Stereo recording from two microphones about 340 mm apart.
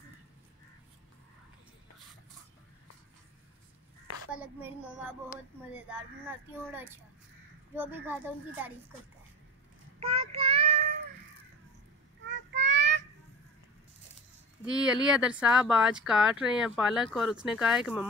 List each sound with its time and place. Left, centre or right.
4.3 s speech: centre
5.8 s speech: centre
9.9 s child singing: centre
12.3 s child singing: right
14.7 s speech: centre